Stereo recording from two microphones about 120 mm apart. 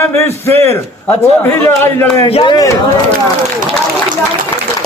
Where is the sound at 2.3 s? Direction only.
50° left (ahead or behind).